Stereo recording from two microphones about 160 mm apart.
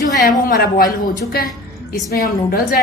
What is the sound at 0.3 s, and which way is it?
Speech, 65° left (ahead or behind).